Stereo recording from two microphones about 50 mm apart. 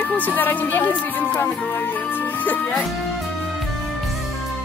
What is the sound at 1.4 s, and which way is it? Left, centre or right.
Speech, left.